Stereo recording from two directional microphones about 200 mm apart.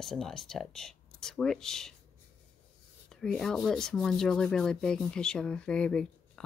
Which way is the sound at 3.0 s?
5° left (ahead or behind).